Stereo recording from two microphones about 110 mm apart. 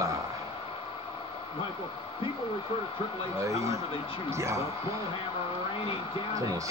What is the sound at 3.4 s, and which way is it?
Speech, 30° right (ahead or behind).